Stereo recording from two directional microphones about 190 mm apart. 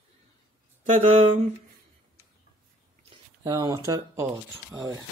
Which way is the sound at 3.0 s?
20° right (ahead or behind).